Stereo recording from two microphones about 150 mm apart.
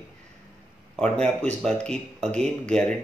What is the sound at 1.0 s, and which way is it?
Speech, 5° left (ahead or behind).